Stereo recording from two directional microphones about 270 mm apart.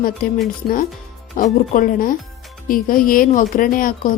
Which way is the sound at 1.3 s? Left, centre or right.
Left.